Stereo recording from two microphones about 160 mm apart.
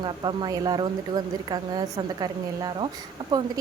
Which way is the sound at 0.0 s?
25° right (ahead or behind).